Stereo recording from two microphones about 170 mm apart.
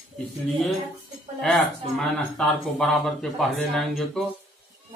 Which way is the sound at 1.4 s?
5° left (ahead or behind).